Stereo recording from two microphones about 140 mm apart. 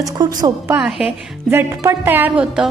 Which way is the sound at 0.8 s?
5° right (ahead or behind).